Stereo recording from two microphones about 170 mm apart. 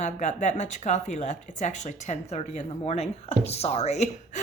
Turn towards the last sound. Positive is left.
turn(degrees=40)  # may be behind; listen again after turning